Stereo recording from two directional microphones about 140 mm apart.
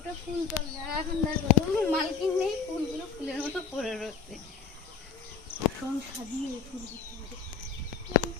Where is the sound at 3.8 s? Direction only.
Centre (ahead or behind).